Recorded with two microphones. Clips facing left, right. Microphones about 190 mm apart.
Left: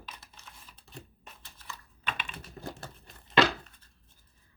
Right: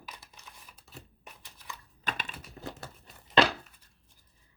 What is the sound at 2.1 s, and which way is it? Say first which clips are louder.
Typing: right 1 dB; 40° right (ahead or behind).